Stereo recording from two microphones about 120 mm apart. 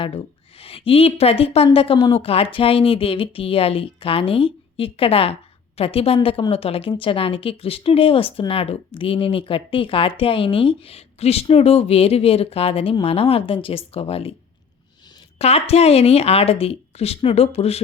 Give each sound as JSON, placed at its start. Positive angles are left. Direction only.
{"t": 0.6, "sound": "a woman's voice", "side_deg": 50}
{"t": 15.4, "sound": "speech", "side_deg": 60}